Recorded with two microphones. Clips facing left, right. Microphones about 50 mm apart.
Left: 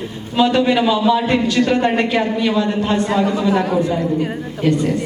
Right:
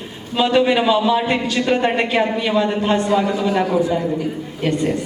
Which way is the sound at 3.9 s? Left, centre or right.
Centre.